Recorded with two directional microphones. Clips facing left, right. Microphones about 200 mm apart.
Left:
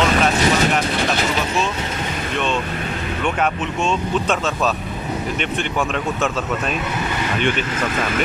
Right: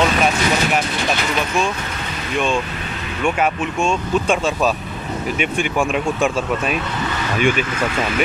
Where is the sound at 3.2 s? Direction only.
10° right (ahead or behind).